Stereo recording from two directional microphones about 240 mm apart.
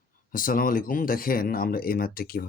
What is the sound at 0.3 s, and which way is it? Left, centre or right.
Speech, left.